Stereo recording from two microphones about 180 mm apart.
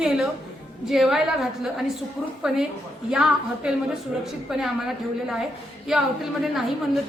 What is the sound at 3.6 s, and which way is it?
A woman's voice, 5° right (ahead or behind).